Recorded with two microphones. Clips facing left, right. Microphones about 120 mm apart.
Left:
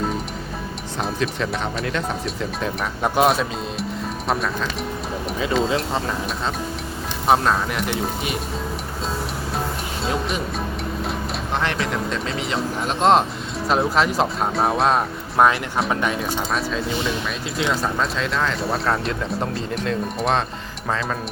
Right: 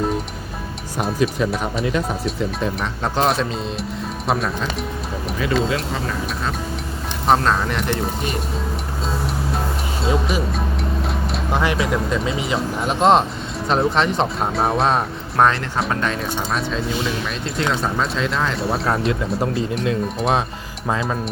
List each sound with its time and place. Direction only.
0.9 s speech: 5° right (ahead or behind)
5.4 s speech: 25° left (ahead or behind)
7.3 s speech: 5° left (ahead or behind)
10.0 s speech: centre (ahead or behind)
11.6 s speech: 5° right (ahead or behind); by 16.2 s 15° left (ahead or behind)
16.5 s speech: centre (ahead or behind)